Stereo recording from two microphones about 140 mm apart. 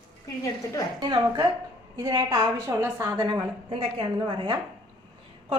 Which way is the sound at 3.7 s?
40° right (ahead or behind).